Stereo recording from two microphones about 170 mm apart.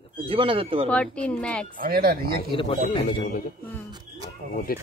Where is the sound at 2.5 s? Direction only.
30° left (ahead or behind).